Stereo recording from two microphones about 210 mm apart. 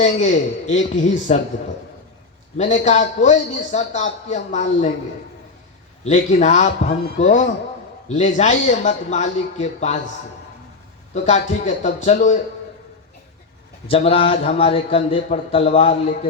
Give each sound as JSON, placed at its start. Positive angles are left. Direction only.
{"t": 0.0, "sound": "a man's voice", "side_deg": 35}
{"t": 2.6, "sound": "a man's voice", "side_deg": 35}
{"t": 6.1, "sound": "a man's voice", "side_deg": 35}
{"t": 11.1, "sound": "a man's voice", "side_deg": 35}
{"t": 13.8, "sound": "speech", "side_deg": 25}